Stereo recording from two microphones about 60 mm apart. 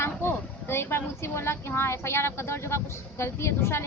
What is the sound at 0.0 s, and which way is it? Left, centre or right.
Speech, left.